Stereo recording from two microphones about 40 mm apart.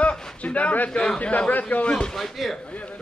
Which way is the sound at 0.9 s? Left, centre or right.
Centre.